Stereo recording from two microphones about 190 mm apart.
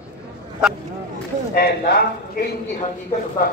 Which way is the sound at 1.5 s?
55° left (ahead or behind).